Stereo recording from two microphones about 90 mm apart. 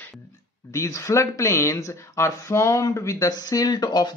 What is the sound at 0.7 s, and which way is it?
Speech, 35° left (ahead or behind).